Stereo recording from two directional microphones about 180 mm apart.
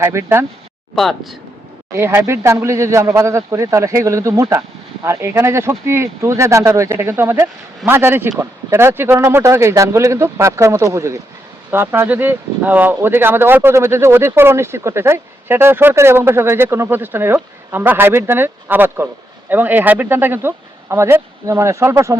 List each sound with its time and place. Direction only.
0.0 s speech: 15° right (ahead or behind)
0.9 s speech: centre (ahead or behind)
1.9 s speech: 15° right (ahead or behind)